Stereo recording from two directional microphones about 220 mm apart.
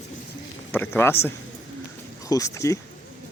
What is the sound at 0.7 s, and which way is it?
Speech, 10° left (ahead or behind).